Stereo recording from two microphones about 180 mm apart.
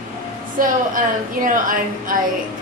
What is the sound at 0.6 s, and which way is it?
A woman's voice, 50° right (ahead or behind).